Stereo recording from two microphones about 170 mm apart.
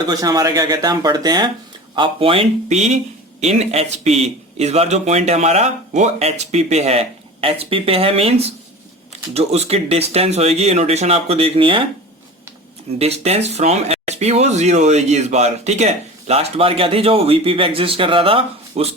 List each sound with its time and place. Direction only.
0.0 s speech: 25° right (ahead or behind)
13.0 s speech: 40° right (ahead or behind)